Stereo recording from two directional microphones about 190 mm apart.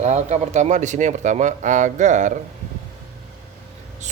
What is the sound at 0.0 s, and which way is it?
A man's voice, 35° right (ahead or behind).